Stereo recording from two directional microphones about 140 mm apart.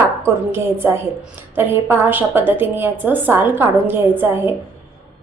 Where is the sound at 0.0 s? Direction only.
15° right (ahead or behind).